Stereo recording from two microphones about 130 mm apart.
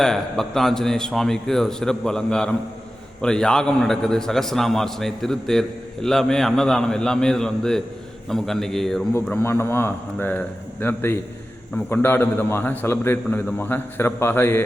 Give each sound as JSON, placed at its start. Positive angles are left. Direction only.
{"t": 0.0, "sound": "a man's voice", "side_deg": 5}
{"t": 9.3, "sound": "a man's voice", "side_deg": 20}